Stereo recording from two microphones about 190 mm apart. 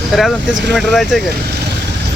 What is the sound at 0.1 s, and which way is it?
Speech, centre (ahead or behind).